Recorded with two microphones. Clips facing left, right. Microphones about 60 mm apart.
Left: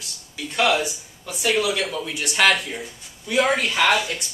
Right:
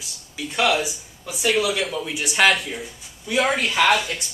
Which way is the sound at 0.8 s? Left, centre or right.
Centre.